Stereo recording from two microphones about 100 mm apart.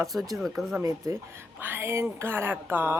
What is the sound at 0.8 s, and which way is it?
Speech, 35° right (ahead or behind).